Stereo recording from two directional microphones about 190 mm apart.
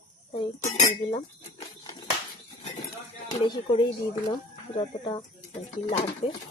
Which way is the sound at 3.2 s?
25° left (ahead or behind).